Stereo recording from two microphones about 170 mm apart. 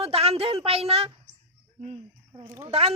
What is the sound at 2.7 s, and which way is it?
Speech, 35° right (ahead or behind).